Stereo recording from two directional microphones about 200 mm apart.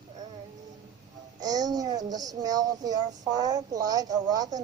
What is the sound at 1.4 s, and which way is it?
A child's voice, 20° right (ahead or behind).